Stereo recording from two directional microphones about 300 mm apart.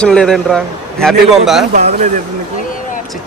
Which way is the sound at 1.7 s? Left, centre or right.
Right.